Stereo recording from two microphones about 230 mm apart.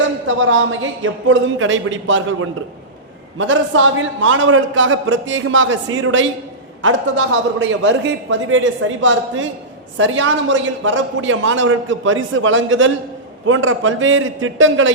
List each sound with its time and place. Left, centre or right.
0.3 s a man's voice: right